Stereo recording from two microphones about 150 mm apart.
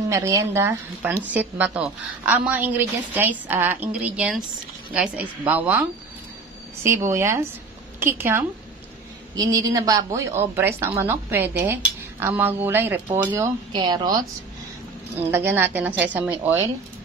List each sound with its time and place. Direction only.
0.1 s a woman's voice: 20° right (ahead or behind)
9.3 s a woman's voice: 25° right (ahead or behind)
13.7 s a woman's voice: 30° right (ahead or behind)
15.1 s a woman's voice: 15° right (ahead or behind)